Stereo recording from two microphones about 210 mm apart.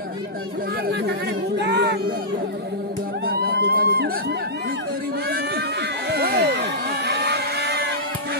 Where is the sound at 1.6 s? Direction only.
55° right (ahead or behind).